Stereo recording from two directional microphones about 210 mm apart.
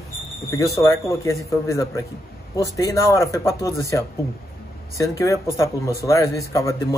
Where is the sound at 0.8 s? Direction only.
15° left (ahead or behind).